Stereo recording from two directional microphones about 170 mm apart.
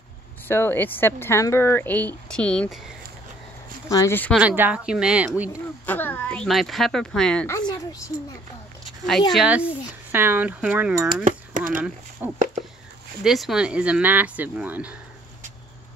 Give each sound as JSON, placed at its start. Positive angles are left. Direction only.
{"t": 0.5, "sound": "speech", "side_deg": 10}
{"t": 3.9, "sound": "speech", "side_deg": 15}
{"t": 4.3, "sound": "speech", "side_deg": -10}
{"t": 5.9, "sound": "speech", "side_deg": 10}
{"t": 7.4, "sound": "speech", "side_deg": 20}
{"t": 9.3, "sound": "speech", "side_deg": -5}